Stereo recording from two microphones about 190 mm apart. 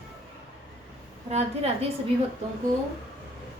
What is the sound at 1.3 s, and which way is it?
Speech, 35° right (ahead or behind).